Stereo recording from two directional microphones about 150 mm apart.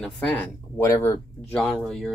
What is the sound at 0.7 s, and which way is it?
Speech, 20° left (ahead or behind).